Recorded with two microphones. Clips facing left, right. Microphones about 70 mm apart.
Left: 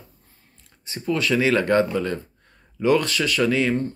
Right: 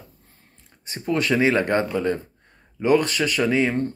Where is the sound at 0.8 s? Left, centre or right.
Right.